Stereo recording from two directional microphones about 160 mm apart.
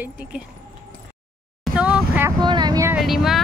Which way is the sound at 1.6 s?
5° right (ahead or behind).